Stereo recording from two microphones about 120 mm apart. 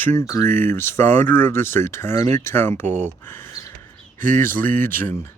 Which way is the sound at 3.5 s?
25° left (ahead or behind).